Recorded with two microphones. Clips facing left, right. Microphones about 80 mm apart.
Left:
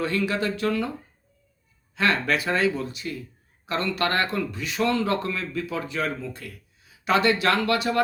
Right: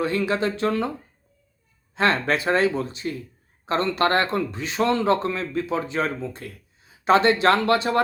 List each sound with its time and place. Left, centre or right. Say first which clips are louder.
0.0 s speech: right 2 dB; right
2.0 s speech: right 2 dB; right